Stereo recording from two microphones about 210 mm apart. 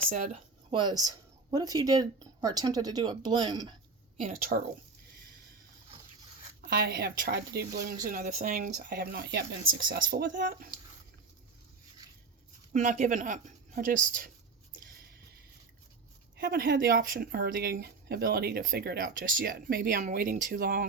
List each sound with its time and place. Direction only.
0.1 s a woman's voice: 35° right (ahead or behind)
0.7 s speech: 20° right (ahead or behind)
4.2 s speech: 40° right (ahead or behind)
6.7 s speech: 50° right (ahead or behind)
7.9 s speech: 35° right (ahead or behind); by 10.7 s 55° right (ahead or behind)
12.7 s a woman's voice: 35° right (ahead or behind)
16.4 s speech: 45° right (ahead or behind)